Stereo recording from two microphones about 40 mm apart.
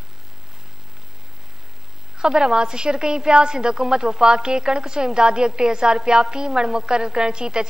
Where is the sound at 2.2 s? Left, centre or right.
Centre.